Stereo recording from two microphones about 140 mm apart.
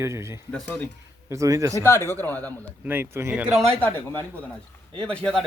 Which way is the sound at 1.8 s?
20° left (ahead or behind).